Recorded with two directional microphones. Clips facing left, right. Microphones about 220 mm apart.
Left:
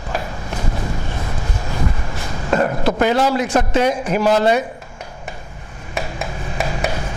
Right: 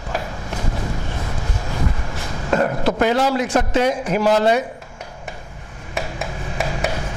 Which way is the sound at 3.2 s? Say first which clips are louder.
Left 1 dB; 15° left (ahead or behind).